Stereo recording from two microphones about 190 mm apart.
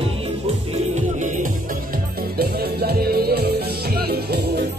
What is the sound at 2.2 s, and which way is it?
Music, 55° right (ahead or behind).